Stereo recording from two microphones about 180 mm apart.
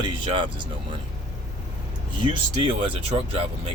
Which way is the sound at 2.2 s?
30° right (ahead or behind).